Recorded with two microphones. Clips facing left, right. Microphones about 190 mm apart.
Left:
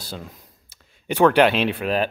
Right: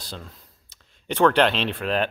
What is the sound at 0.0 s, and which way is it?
A man's voice, 10° left (ahead or behind).